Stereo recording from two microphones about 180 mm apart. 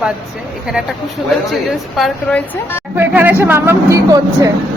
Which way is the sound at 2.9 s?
10° right (ahead or behind).